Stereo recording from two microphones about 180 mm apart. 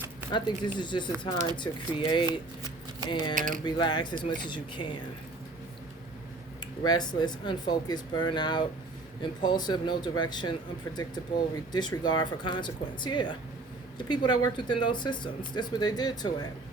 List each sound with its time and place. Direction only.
0.3 s speech: 25° left (ahead or behind)
3.3 s speech: 50° right (ahead or behind)
3.6 s speech: 25° left (ahead or behind)
6.8 s speech: 25° left (ahead or behind)
11.7 s speech: 25° left (ahead or behind)